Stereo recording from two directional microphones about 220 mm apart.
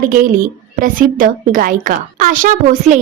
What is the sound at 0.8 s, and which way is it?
A woman's voice, 40° right (ahead or behind).